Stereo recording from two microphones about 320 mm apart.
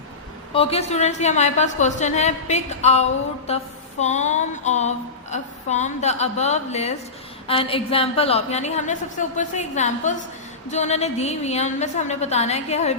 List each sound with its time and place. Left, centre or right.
0.5 s a woman's voice: centre